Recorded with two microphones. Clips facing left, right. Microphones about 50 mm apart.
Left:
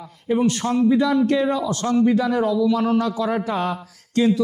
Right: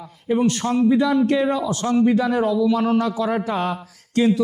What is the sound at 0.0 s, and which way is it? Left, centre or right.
A man's voice, centre.